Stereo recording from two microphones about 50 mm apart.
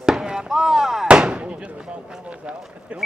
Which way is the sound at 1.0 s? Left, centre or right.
Centre.